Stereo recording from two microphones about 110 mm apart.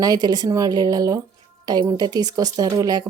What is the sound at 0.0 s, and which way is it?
Speech, 35° right (ahead or behind).